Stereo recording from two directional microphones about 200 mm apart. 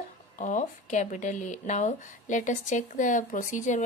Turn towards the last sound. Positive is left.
turn(degrees=40)  # may be behind; listen again after turning